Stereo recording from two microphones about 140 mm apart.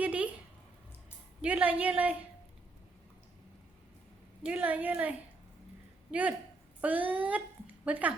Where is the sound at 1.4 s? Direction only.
10° right (ahead or behind).